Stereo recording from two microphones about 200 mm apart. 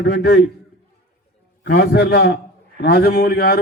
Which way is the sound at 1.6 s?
55° left (ahead or behind).